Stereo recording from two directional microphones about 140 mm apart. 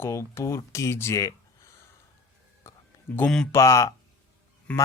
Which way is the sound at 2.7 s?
20° left (ahead or behind).